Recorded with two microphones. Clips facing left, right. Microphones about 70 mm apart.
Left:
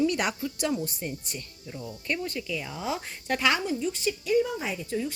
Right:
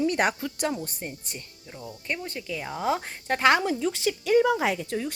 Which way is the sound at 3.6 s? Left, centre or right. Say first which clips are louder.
Right 3 dB; right.